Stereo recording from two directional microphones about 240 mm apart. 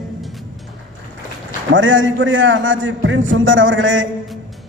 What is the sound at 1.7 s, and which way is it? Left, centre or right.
A man's voice, right.